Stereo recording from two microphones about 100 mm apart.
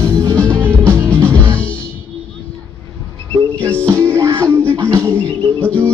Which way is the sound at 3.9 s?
30° right (ahead or behind).